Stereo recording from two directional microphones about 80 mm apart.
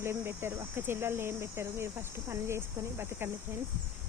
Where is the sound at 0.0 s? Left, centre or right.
Right.